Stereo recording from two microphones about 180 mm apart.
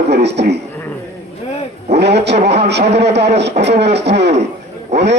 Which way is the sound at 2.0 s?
70° right (ahead or behind).